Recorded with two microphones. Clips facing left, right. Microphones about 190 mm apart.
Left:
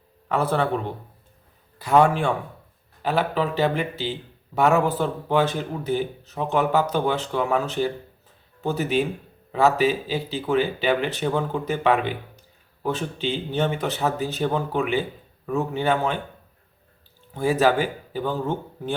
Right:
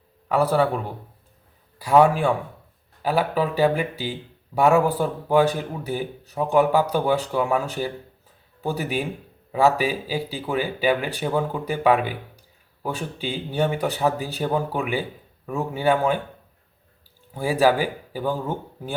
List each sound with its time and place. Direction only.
0.3 s a man's voice: 10° right (ahead or behind)
17.3 s a man's voice: 10° right (ahead or behind)